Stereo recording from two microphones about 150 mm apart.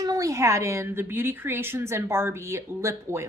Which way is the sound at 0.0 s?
25° right (ahead or behind).